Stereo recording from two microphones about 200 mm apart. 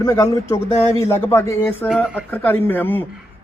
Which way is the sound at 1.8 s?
5° right (ahead or behind).